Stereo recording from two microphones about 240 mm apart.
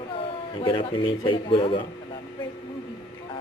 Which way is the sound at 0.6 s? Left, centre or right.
Centre.